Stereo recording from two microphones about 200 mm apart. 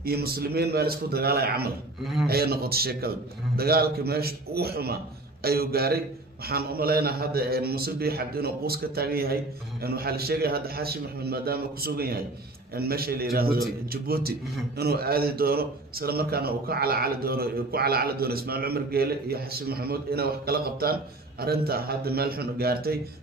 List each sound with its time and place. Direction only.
0.0 s a man's voice: 50° right (ahead or behind)